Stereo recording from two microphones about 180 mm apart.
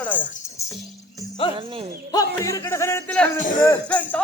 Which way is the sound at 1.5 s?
30° right (ahead or behind).